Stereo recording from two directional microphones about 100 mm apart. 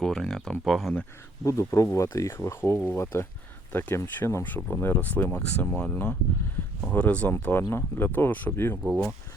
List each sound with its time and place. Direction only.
0.0 s speech: 5° left (ahead or behind)
1.5 s speech: 30° left (ahead or behind)